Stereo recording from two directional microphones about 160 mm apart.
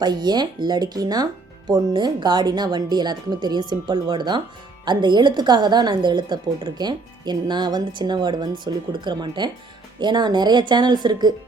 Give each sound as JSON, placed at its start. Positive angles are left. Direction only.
{"t": 0.0, "sound": "a woman's voice", "side_deg": -25}